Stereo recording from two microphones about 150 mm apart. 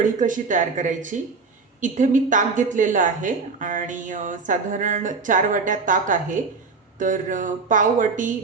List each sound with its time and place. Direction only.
0.0 s a woman's voice: 60° right (ahead or behind)